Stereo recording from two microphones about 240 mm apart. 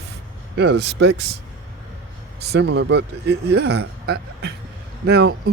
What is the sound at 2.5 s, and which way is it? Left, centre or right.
Speech, right.